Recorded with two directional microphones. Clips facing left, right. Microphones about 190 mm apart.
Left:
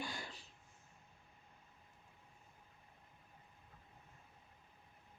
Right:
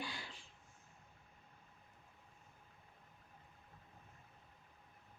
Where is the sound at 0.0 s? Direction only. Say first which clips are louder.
Left 1 dB; 45° left (ahead or behind).